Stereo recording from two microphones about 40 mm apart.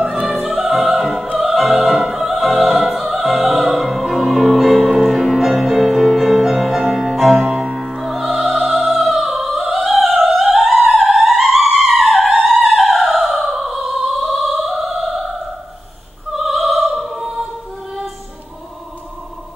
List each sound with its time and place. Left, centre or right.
0.0 s opera: centre
7.4 s music: right
7.7 s music: centre
16.3 s opera: centre